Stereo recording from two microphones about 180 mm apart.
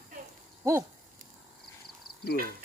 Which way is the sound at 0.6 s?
15° right (ahead or behind).